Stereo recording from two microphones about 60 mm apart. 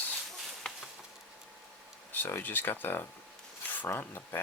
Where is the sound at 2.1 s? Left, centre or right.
Left.